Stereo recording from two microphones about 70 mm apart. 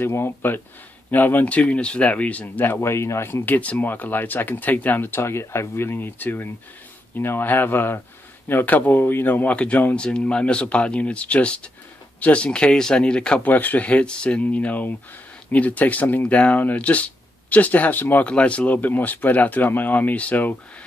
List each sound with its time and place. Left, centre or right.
0.0 s speech: left